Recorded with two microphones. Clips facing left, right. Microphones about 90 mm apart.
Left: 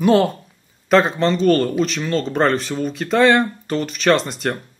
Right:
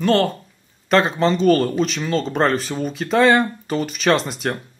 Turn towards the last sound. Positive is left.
turn(degrees=0)  # may be behind; listen again after turning